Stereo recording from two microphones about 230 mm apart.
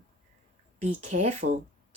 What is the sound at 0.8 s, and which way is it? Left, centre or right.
Speech, right.